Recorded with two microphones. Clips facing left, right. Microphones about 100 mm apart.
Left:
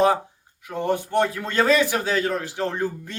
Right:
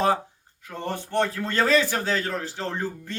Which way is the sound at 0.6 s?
15° left (ahead or behind).